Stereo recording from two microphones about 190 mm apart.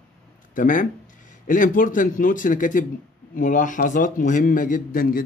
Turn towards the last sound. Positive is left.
turn(degrees=45)  # may be behind; listen again after turning